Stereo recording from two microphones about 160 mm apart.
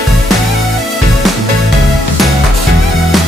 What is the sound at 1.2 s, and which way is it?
Music, centre (ahead or behind).